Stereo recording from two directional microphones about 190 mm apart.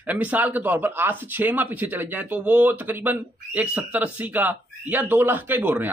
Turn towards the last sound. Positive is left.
turn(degrees=-10)  # may be behind; listen again after turning